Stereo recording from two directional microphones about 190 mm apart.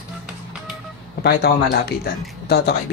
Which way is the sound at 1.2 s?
60° left (ahead or behind).